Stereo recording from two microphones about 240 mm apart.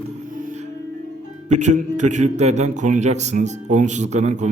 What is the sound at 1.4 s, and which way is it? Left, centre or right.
Speech, right.